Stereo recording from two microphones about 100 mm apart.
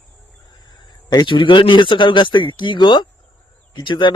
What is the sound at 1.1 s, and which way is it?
Speech, 50° left (ahead or behind).